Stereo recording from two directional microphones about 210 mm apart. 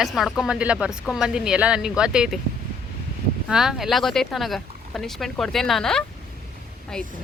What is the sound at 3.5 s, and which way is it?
A woman's voice, centre (ahead or behind).